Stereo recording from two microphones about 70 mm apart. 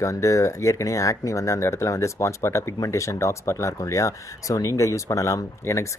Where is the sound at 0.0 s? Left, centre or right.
Left.